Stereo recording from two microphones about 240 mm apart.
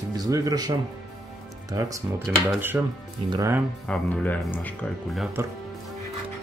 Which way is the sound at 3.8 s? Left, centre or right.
Centre.